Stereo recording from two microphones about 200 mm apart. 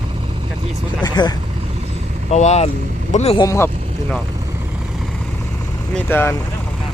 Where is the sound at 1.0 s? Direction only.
20° left (ahead or behind).